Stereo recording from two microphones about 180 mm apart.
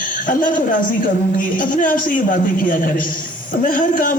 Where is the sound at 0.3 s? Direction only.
50° left (ahead or behind).